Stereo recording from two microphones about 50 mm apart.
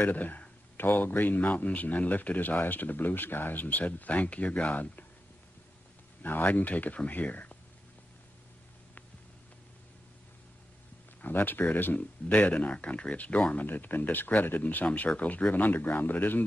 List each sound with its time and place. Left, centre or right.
0.0 s speech: left
6.2 s speech: left
11.1 s speech: left
12.4 s speech: left
13.7 s speech: left
14.9 s speech: left